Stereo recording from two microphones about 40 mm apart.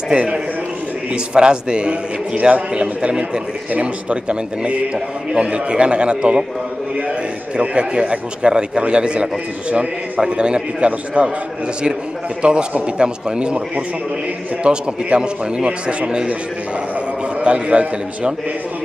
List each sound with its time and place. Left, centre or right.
0.1 s a man's voice: right
7.5 s a man's voice: right
12.4 s a man's voice: right
17.4 s a man's voice: right